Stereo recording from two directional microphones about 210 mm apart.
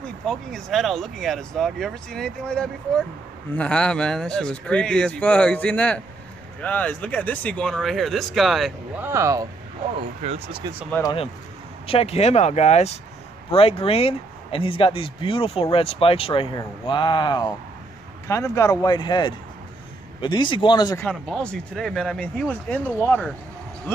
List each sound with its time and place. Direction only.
0.0 s speech: centre (ahead or behind); by 9.5 s 15° right (ahead or behind)
10.2 s speech: 30° right (ahead or behind)
10.9 s speech: 15° left (ahead or behind)
11.9 s speech: 30° left (ahead or behind)
21.0 s speech: 5° left (ahead or behind)